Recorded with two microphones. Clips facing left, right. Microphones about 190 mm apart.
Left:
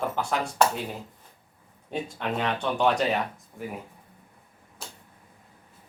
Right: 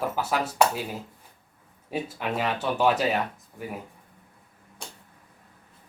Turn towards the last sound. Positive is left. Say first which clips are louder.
# right 1 dB
turn(degrees=0)  # may be behind; listen again after turning